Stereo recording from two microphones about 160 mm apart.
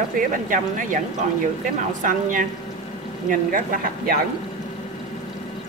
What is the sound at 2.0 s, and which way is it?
Speech, 55° right (ahead or behind).